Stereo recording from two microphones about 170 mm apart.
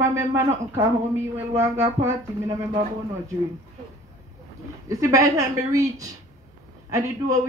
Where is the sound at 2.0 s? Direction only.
15° right (ahead or behind).